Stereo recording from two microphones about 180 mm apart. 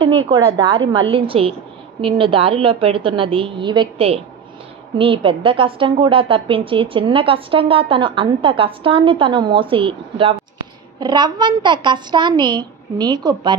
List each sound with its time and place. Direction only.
0.0 s a woman's voice: 30° right (ahead or behind)